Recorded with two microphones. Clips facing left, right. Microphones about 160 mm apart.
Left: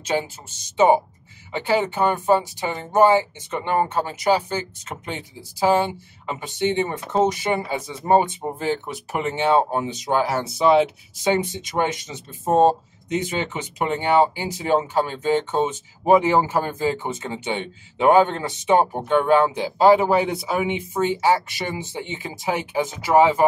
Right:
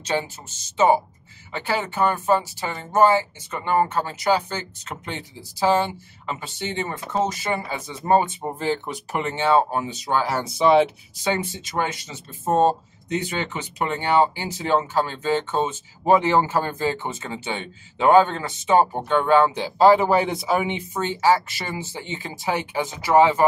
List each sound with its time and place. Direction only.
0.0 s speech: 10° left (ahead or behind)
8.7 s speech: 5° left (ahead or behind)
11.2 s speech: 15° left (ahead or behind); by 20.7 s centre (ahead or behind)
20.9 s speech: 10° left (ahead or behind)